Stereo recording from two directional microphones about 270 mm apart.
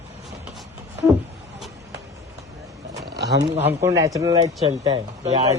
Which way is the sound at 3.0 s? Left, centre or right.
Right.